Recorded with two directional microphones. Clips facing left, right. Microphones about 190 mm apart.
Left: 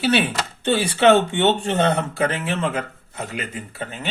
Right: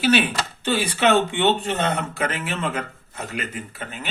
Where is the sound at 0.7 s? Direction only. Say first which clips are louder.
Left 4 dB; 25° left (ahead or behind).